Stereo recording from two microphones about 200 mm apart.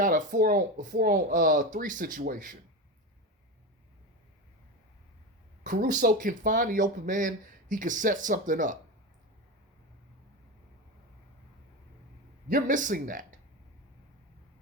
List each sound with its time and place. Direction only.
0.0 s speech: 40° right (ahead or behind)
5.6 s speech: 40° right (ahead or behind)
12.5 s speech: 45° right (ahead or behind)